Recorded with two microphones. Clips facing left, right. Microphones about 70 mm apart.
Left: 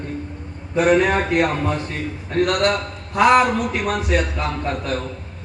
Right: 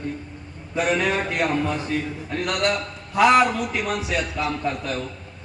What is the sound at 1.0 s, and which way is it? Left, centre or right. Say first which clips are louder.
A man's voice: left 4 dB; left.